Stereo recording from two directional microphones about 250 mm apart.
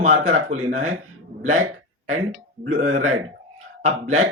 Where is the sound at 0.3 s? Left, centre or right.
Right.